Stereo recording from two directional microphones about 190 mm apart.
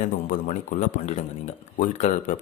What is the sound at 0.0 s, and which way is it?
Speech, 40° left (ahead or behind).